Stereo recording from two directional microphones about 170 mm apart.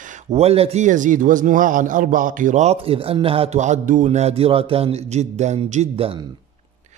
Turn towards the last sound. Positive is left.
turn(degrees=-40)  # may be behind; listen again after turning